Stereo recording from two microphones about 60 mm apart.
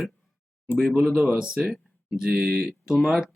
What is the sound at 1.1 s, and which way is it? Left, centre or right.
Speech, centre.